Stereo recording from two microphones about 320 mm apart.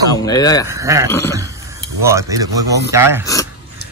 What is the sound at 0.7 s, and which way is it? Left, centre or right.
A man's voice, centre.